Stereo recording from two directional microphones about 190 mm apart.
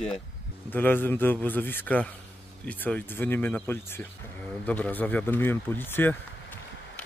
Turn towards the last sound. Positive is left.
turn(degrees=10)  # may be behind; listen again after turning